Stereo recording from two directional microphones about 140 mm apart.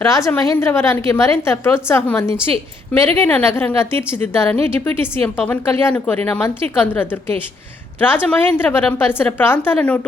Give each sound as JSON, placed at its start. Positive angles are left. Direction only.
{"t": 0.0, "sound": "a woman's voice", "side_deg": 20}